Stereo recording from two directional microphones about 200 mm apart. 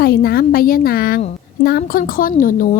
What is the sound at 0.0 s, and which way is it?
A woman's voice, 50° left (ahead or behind).